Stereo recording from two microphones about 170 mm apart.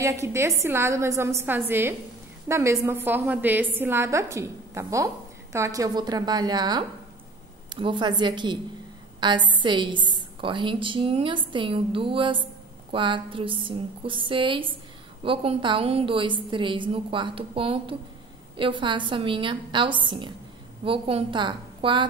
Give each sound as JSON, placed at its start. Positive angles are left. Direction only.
{"t": 0.0, "sound": "a woman's voice", "side_deg": -15}